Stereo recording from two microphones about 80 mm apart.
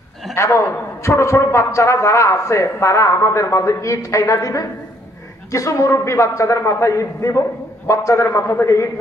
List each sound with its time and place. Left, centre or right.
0.3 s a man's voice: left